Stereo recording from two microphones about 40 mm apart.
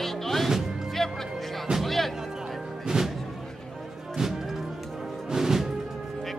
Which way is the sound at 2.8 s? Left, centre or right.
Centre.